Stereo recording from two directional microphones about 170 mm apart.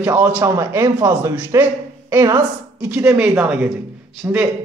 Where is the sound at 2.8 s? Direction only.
5° right (ahead or behind).